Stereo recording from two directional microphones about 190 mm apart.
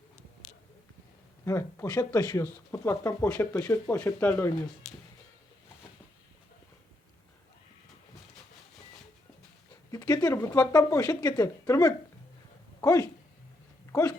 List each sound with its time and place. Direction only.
1.5 s speech: 15° left (ahead or behind)
9.9 s speech: 20° left (ahead or behind)